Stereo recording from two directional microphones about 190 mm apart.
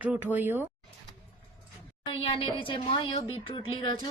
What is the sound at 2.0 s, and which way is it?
Speech, 25° left (ahead or behind).